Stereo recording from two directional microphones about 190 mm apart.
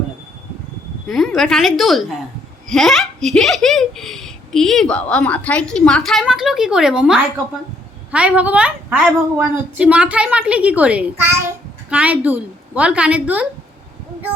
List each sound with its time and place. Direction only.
1.0 s a woman's voice: centre (ahead or behind)